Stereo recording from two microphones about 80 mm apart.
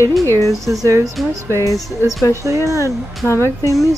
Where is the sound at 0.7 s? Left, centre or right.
Right.